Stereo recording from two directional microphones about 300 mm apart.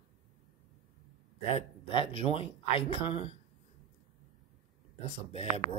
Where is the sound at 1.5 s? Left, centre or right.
Centre.